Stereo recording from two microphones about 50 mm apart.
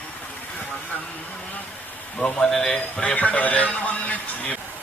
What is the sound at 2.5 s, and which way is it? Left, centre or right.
A man's voice, centre.